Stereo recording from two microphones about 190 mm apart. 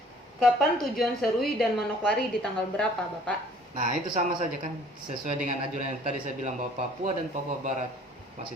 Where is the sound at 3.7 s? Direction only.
40° right (ahead or behind).